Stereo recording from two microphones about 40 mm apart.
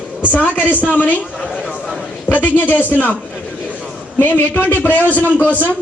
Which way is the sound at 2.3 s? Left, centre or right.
Left.